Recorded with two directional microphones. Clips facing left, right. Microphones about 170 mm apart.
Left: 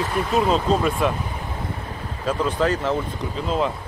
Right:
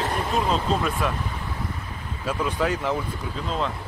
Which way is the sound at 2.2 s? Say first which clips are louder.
Left 4 dB; 10° right (ahead or behind).